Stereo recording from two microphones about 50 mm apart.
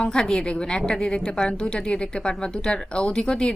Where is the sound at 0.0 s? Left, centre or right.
Centre.